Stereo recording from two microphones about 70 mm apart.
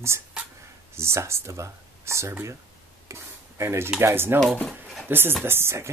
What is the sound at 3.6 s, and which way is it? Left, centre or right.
Speech, right.